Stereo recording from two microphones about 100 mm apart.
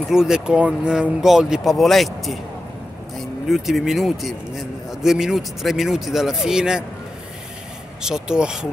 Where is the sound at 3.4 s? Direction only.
Centre (ahead or behind).